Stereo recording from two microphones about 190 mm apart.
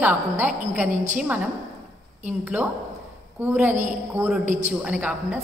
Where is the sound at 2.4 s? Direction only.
5° right (ahead or behind).